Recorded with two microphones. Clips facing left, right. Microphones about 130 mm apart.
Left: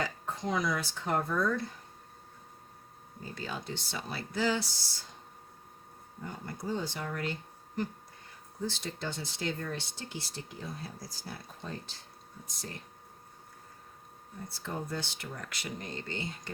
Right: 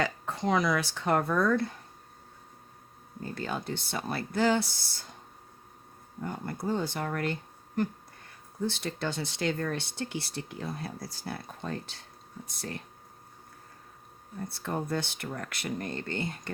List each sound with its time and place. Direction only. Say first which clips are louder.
0.0 s speech: right 5 dB; 70° right (ahead or behind)
3.3 s speech: right 5 dB; 55° right (ahead or behind)
6.2 s speech: right 5 dB; 55° right (ahead or behind)
8.6 s speech: right 5 dB; 60° right (ahead or behind)
14.4 s speech: right 5 dB; 60° right (ahead or behind)